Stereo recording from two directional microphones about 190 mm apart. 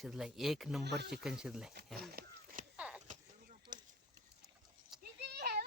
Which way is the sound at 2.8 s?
5° right (ahead or behind).